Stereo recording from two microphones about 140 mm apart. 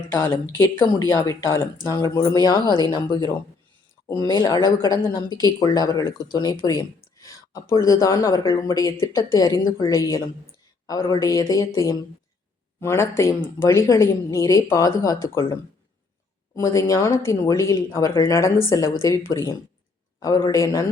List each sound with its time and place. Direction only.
0.1 s speech: 20° left (ahead or behind)
16.6 s speech: 20° left (ahead or behind)